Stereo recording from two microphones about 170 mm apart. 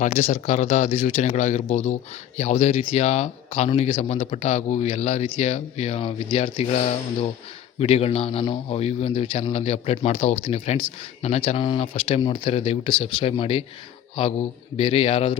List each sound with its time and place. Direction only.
0.0 s a man's voice: 40° left (ahead or behind)
14.8 s a man's voice: 30° left (ahead or behind)